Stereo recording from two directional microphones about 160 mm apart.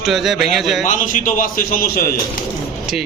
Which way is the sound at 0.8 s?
55° left (ahead or behind).